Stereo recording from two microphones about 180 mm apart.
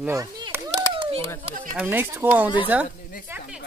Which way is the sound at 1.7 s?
10° right (ahead or behind).